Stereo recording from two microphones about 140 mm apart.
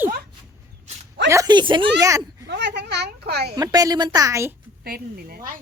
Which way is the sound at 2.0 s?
25° right (ahead or behind).